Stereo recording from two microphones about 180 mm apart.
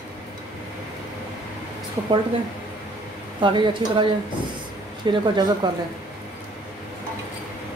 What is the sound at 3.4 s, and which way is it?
A woman's voice, 25° right (ahead or behind).